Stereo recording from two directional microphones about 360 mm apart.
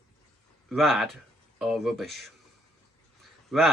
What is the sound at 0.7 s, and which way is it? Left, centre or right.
Speech, centre.